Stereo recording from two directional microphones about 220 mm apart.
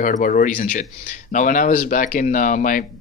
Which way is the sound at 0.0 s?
35° left (ahead or behind).